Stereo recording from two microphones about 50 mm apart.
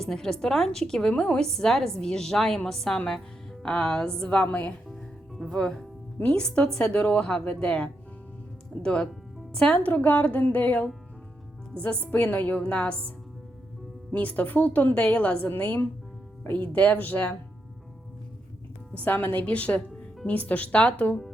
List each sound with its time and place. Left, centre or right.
0.0 s a woman's voice: centre; by 4.7 s left
5.5 s a woman's voice: centre
7.3 s a woman's voice: centre
9.7 s a woman's voice: left
18.9 s a woman's voice: left